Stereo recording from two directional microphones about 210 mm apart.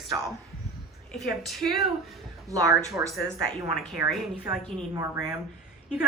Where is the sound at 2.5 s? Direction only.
15° right (ahead or behind).